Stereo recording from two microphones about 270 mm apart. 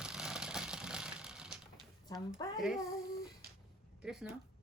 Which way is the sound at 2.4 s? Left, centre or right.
Centre.